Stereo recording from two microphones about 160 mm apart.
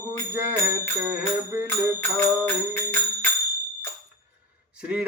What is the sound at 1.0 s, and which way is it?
Speech, 15° right (ahead or behind).